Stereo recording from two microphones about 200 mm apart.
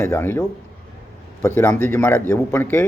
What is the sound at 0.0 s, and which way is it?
Speech, 15° left (ahead or behind).